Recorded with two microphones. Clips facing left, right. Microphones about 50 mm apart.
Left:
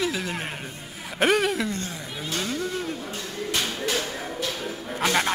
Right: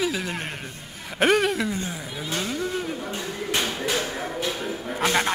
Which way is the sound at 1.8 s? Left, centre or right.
Centre.